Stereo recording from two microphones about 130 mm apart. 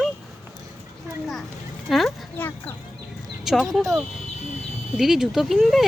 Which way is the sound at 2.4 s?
15° left (ahead or behind).